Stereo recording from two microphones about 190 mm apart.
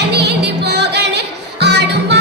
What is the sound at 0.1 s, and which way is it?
Music, 60° right (ahead or behind).